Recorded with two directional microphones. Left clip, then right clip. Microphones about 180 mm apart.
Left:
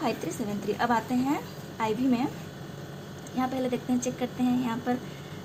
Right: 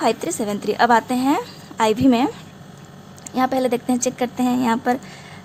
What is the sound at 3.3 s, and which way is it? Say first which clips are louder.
Speech: right 10 dB; 50° right (ahead or behind).